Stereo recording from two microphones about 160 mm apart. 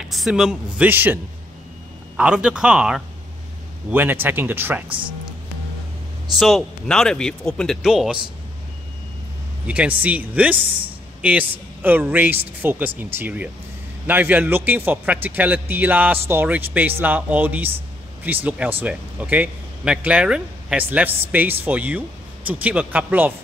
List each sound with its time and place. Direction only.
0.0 s a man's voice: centre (ahead or behind)
4.8 s speech: 35° right (ahead or behind)
6.3 s speech: centre (ahead or behind)
9.7 s a man's voice: 10° right (ahead or behind)